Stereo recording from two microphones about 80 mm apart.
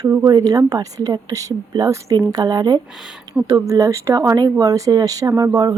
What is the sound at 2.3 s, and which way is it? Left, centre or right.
Speech, right.